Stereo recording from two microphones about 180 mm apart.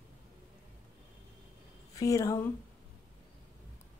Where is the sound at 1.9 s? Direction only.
20° left (ahead or behind).